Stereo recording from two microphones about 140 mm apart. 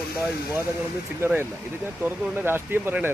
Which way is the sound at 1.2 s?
15° right (ahead or behind).